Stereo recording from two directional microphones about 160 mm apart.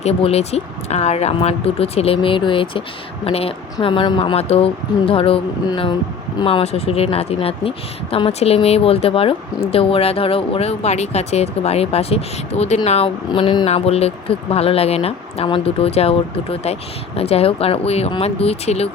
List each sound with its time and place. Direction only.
0.0 s speech: 40° left (ahead or behind)
13.7 s speech: 40° left (ahead or behind)